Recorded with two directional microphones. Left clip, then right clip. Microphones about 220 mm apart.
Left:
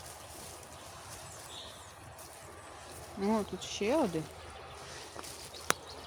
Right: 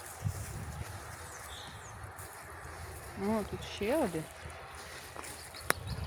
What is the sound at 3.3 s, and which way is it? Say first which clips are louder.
Speech: left 2 dB; 20° left (ahead or behind).